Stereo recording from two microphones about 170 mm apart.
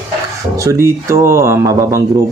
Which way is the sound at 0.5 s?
15° right (ahead or behind).